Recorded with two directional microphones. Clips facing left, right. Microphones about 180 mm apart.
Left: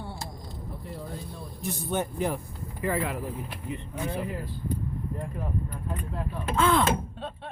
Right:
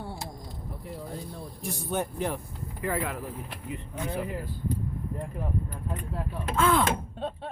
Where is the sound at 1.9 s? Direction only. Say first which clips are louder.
Left 1 dB; centre (ahead or behind).